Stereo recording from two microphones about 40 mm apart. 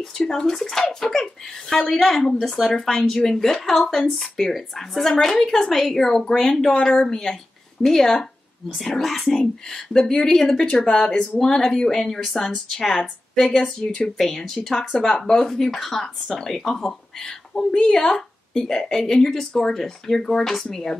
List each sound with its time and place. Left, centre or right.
0.0 s speech: centre
17.2 s a woman's voice: centre